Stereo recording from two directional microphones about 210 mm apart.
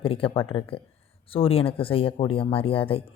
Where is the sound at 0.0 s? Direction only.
25° left (ahead or behind).